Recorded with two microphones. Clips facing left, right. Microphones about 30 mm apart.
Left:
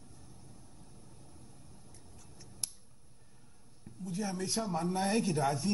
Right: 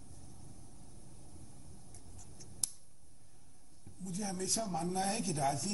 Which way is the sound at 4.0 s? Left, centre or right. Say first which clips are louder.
Left 3 dB; left.